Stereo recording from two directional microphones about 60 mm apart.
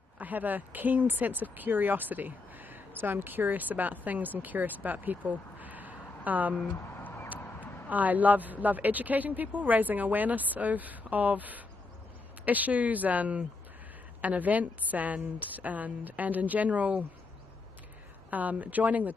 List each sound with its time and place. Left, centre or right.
0.2 s speech: right
7.0 s vehicle: left
7.9 s a woman's voice: right
18.3 s a woman's voice: right